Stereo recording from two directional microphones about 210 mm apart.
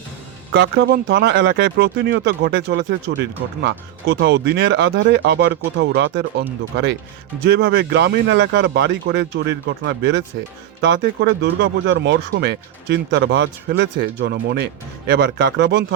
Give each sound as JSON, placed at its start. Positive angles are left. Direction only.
{"t": 0.5, "sound": "speech", "side_deg": -55}